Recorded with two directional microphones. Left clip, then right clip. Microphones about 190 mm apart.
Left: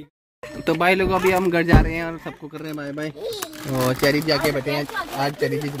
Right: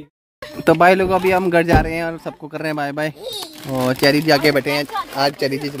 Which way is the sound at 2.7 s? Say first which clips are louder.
Right 6 dB; 60° right (ahead or behind).